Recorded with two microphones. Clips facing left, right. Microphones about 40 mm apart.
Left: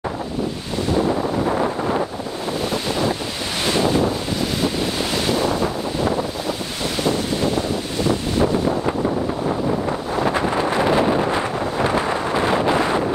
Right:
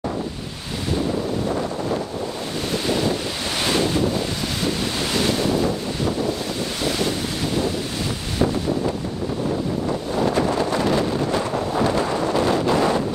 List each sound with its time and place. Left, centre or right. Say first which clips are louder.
1.6 s wind noise: left 4 dB; left
2.7 s wind noise: right 2 dB; centre
3.6 s waves: left 3 dB; centre
7.0 s wind noise: left 3 dB; centre
9.8 s wind noise: left 1 dB; left